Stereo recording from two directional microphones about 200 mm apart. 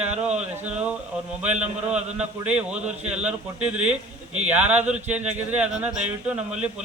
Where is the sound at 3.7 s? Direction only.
5° right (ahead or behind).